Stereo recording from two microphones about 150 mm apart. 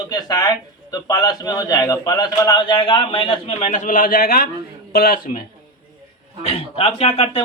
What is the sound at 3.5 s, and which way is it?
A man's voice, 55° left (ahead or behind).